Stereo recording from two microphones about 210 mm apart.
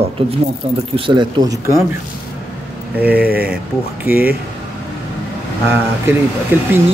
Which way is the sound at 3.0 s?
5° right (ahead or behind).